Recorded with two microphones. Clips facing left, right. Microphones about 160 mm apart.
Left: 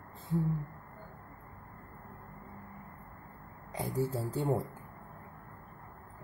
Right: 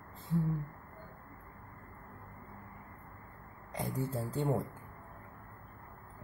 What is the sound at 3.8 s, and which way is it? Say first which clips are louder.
Speech: left 3 dB; centre (ahead or behind).